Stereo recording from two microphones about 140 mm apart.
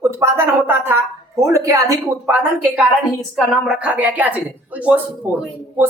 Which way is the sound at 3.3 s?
Centre (ahead or behind).